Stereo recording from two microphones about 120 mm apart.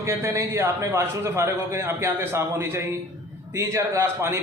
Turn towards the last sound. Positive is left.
turn(degrees=-20)  # may be behind; listen again after turning